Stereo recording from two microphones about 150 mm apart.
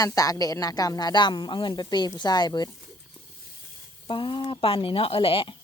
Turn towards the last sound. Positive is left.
turn(degrees=35)  # may be behind; listen again after turning